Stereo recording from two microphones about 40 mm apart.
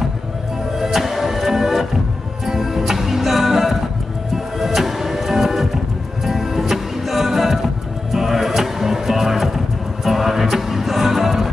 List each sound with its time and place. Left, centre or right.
0.7 s music: centre